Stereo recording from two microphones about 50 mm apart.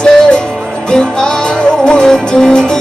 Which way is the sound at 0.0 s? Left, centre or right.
Centre.